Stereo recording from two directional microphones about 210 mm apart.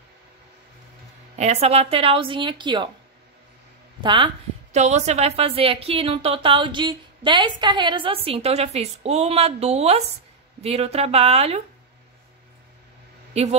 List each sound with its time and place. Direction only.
1.4 s a woman's voice: 30° right (ahead or behind)
4.0 s a woman's voice: 25° right (ahead or behind)
13.3 s speech: 30° right (ahead or behind)